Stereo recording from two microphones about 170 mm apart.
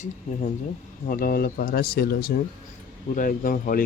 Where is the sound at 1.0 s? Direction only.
55° left (ahead or behind).